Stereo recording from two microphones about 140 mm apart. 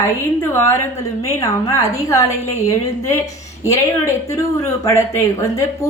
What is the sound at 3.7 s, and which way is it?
A woman's voice, 20° left (ahead or behind).